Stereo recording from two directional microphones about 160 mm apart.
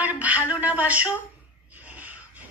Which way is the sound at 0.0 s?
10° right (ahead or behind).